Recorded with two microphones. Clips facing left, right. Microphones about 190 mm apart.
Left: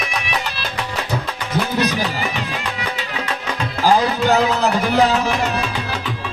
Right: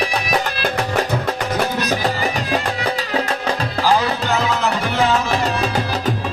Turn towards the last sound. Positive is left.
turn(degrees=-35)  # may be behind; listen again after turning